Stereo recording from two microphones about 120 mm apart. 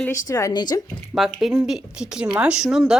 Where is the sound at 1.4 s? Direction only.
5° right (ahead or behind).